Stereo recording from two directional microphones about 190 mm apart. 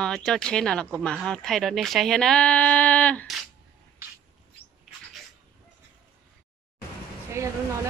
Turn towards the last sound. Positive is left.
turn(degrees=-15)  # may be behind; listen again after turning